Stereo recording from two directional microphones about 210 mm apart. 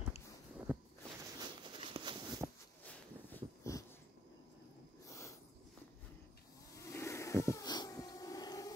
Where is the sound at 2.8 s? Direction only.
10° left (ahead or behind).